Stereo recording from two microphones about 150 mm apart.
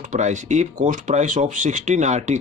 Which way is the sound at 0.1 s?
55° right (ahead or behind).